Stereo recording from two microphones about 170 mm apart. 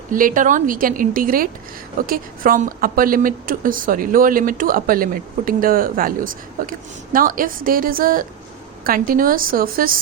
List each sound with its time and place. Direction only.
0.1 s a woman's voice: 55° right (ahead or behind)